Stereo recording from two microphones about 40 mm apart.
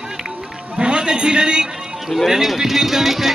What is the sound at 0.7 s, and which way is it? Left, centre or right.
Speech, right.